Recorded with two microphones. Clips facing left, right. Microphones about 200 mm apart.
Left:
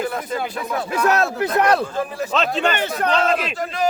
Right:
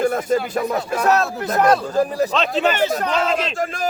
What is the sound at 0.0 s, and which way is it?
A man's voice, 45° right (ahead or behind).